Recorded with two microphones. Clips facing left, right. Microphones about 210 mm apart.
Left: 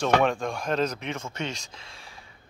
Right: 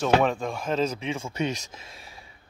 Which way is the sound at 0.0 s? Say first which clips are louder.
Right 1 dB; 5° right (ahead or behind).